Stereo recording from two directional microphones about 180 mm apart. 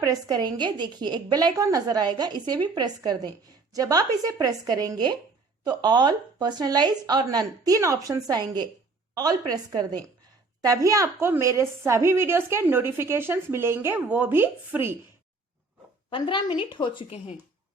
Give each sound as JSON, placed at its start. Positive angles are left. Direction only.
{"t": 0.0, "sound": "a woman's voice", "side_deg": -20}
{"t": 16.0, "sound": "a woman's voice", "side_deg": 25}